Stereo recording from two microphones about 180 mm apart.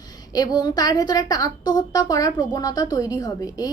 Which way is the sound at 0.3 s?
20° left (ahead or behind).